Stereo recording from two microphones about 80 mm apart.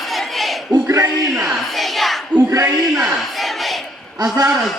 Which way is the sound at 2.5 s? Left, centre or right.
Right.